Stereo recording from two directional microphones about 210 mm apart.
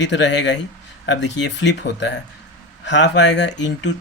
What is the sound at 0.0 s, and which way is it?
Speech, 60° left (ahead or behind).